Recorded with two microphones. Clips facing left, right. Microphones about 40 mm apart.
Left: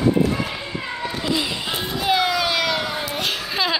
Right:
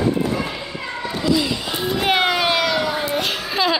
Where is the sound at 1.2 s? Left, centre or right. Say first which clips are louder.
Right 5 dB; centre.